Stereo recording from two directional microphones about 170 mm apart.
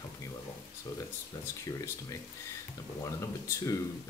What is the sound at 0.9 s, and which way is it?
Speech, 20° left (ahead or behind).